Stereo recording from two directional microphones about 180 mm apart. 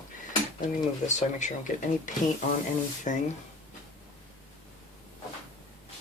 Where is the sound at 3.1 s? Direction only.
45° left (ahead or behind).